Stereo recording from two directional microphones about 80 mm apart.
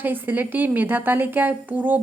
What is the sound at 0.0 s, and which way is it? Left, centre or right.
A woman's voice, right.